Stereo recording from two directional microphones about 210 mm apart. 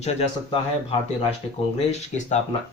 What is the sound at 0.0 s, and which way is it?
Speech, 30° left (ahead or behind).